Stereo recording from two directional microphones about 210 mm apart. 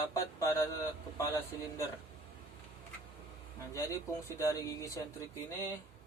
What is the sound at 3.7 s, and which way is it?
Speech, 15° left (ahead or behind).